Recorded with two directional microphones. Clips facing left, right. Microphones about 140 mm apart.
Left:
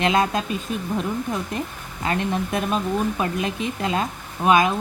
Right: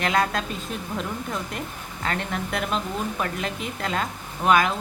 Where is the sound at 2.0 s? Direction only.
15° left (ahead or behind).